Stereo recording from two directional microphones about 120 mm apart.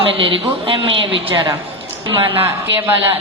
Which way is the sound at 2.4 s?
15° right (ahead or behind).